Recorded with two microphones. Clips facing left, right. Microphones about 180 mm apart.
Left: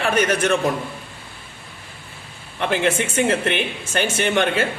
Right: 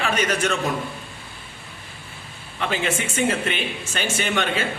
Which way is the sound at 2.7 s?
60° left (ahead or behind).